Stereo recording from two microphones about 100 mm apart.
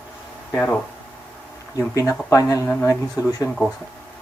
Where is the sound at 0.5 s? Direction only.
20° left (ahead or behind).